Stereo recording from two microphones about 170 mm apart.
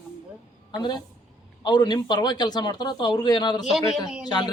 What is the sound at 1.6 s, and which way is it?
Speech, 25° left (ahead or behind).